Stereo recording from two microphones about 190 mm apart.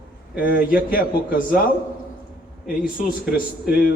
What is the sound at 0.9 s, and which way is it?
Speech, 50° left (ahead or behind).